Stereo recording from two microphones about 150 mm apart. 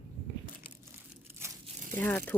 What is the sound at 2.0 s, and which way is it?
Speech, 10° left (ahead or behind).